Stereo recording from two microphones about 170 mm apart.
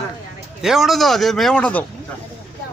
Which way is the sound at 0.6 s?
Centre (ahead or behind).